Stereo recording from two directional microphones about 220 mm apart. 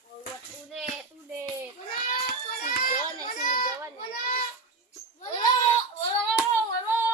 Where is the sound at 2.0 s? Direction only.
35° left (ahead or behind).